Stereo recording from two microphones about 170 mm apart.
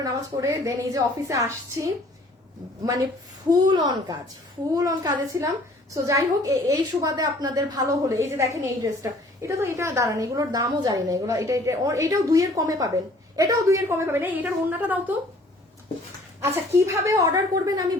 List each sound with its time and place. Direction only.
0.0 s a woman's voice: 20° right (ahead or behind)
3.5 s a woman's voice: 25° right (ahead or behind)
16.4 s a woman's voice: 15° right (ahead or behind)